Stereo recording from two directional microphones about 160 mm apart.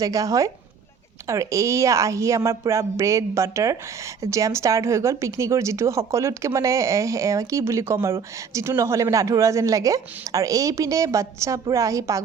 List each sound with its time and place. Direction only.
0.0 s a woman's voice: 20° right (ahead or behind)